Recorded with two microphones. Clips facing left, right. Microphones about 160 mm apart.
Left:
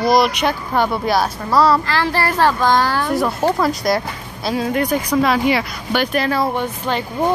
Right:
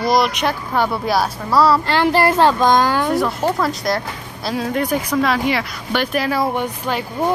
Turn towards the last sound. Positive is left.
turn(degrees=-10)  # may be behind; listen again after turning